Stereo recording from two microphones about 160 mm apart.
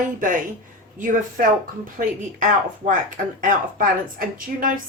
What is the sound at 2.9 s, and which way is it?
Speech, 55° right (ahead or behind).